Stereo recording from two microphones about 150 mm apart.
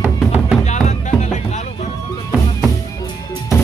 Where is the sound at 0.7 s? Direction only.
50° left (ahead or behind).